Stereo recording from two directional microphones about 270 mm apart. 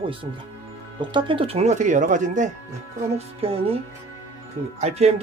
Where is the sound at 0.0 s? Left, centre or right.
Centre.